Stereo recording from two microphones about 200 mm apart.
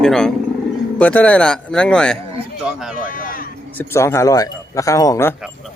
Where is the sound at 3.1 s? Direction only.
45° left (ahead or behind).